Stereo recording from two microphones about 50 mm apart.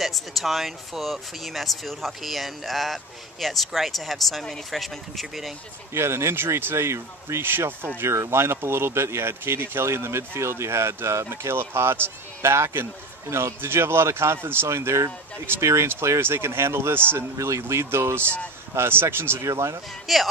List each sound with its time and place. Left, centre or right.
0.0 s speech: centre
5.9 s speech: right
7.4 s speech: right
8.0 s speech: right
14.7 s speech: right
15.9 s speech: right
17.4 s speech: right
18.2 s a man's voice: left
18.8 s speech: right
19.4 s speech: right
20.1 s speech: centre